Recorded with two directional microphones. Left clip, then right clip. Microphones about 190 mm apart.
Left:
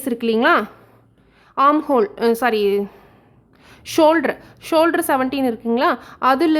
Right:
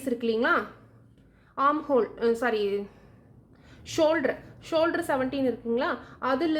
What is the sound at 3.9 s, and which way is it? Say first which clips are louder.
A woman's voice: left 9 dB; 40° left (ahead or behind).